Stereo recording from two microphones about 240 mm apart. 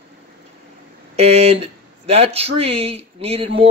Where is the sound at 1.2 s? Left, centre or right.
Right.